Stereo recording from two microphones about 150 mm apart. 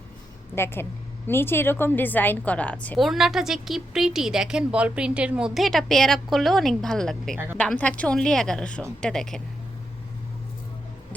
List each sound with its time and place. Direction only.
0.5 s a woman's voice: 15° left (ahead or behind)
3.0 s a woman's voice: centre (ahead or behind)